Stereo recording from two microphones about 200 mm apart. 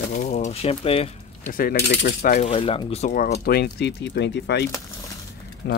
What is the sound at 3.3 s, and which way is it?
Speech, 50° left (ahead or behind).